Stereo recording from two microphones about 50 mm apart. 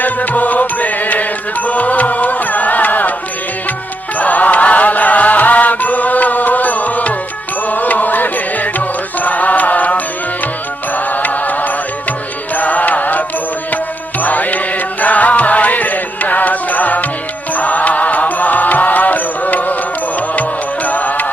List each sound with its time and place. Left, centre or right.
0.0 s music: left
4.2 s music: left